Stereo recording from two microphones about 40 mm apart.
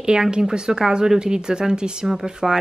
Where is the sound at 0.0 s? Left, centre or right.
Right.